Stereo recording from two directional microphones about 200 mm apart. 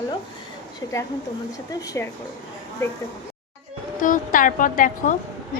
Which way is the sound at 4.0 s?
40° left (ahead or behind).